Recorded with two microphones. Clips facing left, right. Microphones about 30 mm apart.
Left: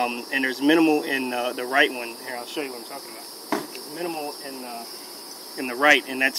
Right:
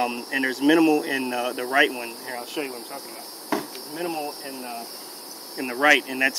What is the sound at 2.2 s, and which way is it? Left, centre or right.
Speech, centre.